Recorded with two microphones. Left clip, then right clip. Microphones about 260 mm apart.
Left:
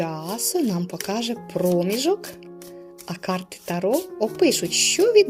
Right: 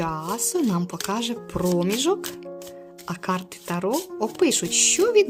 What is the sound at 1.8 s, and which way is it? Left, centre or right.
Speech, centre.